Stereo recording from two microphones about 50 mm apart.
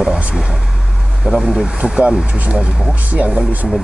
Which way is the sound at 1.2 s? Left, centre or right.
Centre.